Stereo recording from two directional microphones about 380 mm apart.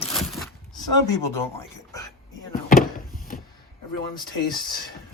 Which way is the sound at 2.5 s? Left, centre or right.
Left.